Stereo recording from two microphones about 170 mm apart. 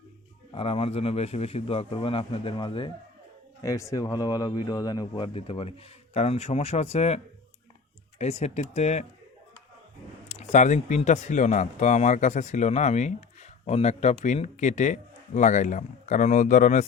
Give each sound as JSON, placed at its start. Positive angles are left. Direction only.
{"t": 0.5, "sound": "a man's voice", "side_deg": 35}
{"t": 3.6, "sound": "a man's voice", "side_deg": 20}
{"t": 8.2, "sound": "a man's voice", "side_deg": 40}
{"t": 10.2, "sound": "speech", "side_deg": 45}